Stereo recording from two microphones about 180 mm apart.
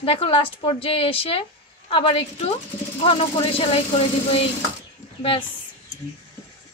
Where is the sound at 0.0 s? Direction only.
30° left (ahead or behind).